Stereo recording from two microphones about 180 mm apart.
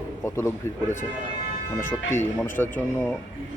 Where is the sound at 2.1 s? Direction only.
15° left (ahead or behind).